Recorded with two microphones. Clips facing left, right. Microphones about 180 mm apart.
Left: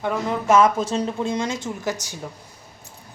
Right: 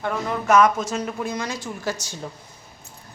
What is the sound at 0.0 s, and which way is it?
Speech, 20° left (ahead or behind).